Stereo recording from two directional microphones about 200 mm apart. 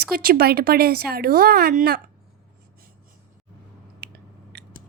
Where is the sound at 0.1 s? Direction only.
50° right (ahead or behind).